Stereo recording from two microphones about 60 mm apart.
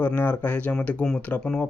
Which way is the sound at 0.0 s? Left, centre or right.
Left.